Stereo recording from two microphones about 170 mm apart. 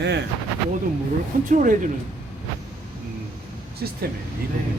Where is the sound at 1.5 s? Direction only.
50° right (ahead or behind).